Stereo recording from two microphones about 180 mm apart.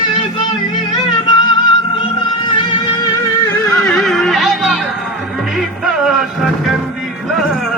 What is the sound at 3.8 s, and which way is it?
Music, 5° left (ahead or behind).